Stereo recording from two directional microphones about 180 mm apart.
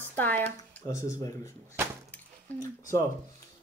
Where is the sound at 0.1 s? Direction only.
10° left (ahead or behind).